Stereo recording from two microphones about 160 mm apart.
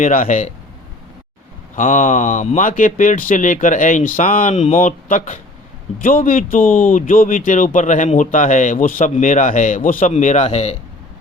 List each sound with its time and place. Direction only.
0.0 s speech: 55° left (ahead or behind)
1.7 s speech: 55° left (ahead or behind)